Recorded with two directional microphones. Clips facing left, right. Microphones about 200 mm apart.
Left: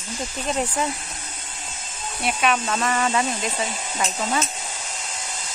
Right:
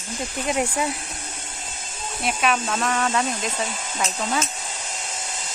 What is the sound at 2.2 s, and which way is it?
Speech, centre (ahead or behind).